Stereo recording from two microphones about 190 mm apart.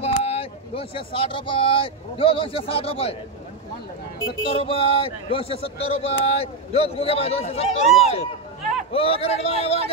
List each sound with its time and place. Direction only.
0.0 s speech: 30° left (ahead or behind)
4.4 s a man's voice: 30° left (ahead or behind)